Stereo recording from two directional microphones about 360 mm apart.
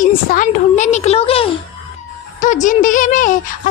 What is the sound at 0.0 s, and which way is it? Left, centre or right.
A woman's voice, left.